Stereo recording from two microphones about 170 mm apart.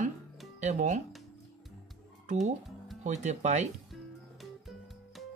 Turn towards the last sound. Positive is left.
turn(degrees=0)  # may be behind; listen again after turning